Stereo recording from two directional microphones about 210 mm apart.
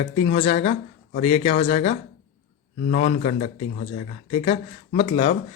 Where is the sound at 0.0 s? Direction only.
30° left (ahead or behind).